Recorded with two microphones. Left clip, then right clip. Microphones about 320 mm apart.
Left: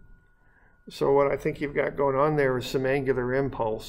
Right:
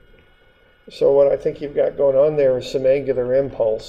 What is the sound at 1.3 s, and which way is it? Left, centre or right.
Speech, left.